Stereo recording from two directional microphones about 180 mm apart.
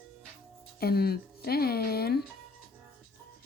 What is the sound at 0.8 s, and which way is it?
Speech, 60° left (ahead or behind).